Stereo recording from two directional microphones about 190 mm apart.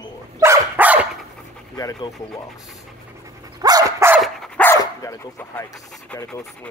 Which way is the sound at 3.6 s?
20° right (ahead or behind).